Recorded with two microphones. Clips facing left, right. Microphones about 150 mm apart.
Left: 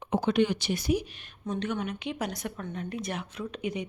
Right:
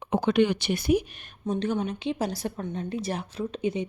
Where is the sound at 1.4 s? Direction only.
30° right (ahead or behind).